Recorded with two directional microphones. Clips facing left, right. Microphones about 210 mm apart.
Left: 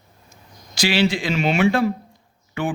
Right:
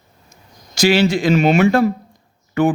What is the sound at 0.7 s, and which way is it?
Speech, 45° right (ahead or behind).